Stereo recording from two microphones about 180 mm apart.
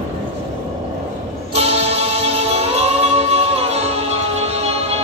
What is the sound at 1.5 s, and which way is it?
Music, 35° right (ahead or behind).